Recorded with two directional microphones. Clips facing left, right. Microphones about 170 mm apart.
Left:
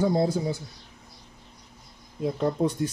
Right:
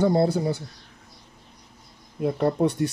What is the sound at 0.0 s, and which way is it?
Speech, 65° right (ahead or behind).